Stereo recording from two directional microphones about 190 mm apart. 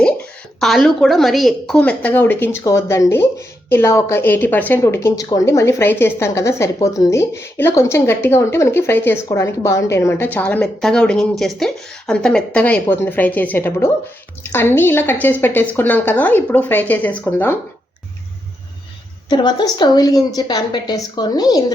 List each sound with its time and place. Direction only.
0.6 s a woman's voice: centre (ahead or behind)
19.3 s a woman's voice: 25° left (ahead or behind)